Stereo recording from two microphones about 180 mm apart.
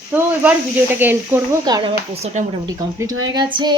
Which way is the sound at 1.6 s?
25° right (ahead or behind).